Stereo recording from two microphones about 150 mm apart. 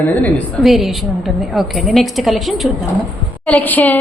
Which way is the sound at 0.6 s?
Centre (ahead or behind).